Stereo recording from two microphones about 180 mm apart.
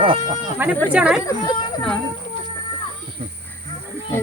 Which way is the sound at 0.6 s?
10° right (ahead or behind).